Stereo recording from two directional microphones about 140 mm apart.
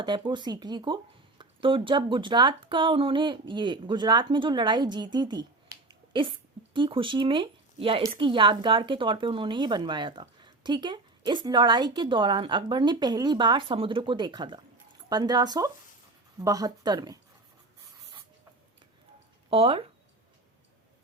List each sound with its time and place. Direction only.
0.3 s a woman's voice: 30° right (ahead or behind)
19.5 s a woman's voice: 40° right (ahead or behind)